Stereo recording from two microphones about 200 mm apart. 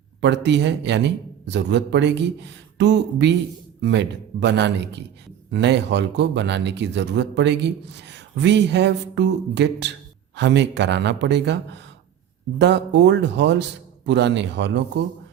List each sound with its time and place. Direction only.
0.2 s speech: 60° right (ahead or behind)